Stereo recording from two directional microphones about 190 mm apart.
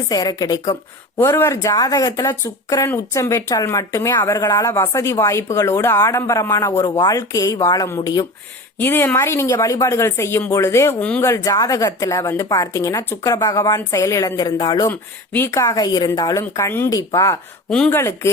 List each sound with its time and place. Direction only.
0.1 s a woman's voice: 20° left (ahead or behind)
14.8 s a woman's voice: 10° left (ahead or behind)
17.7 s speech: 5° left (ahead or behind)
17.9 s a woman's voice: 15° left (ahead or behind)